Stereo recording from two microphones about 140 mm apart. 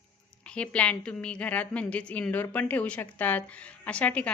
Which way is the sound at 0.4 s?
10° left (ahead or behind).